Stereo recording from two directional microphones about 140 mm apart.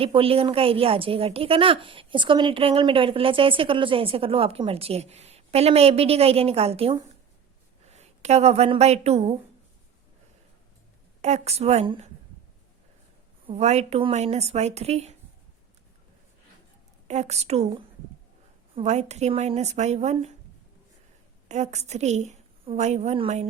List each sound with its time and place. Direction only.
0.0 s a woman's voice: 40° right (ahead or behind)
11.2 s speech: 50° right (ahead or behind)
13.5 s speech: 50° right (ahead or behind)
17.1 s speech: 50° right (ahead or behind)
21.4 s a woman's voice: 55° right (ahead or behind)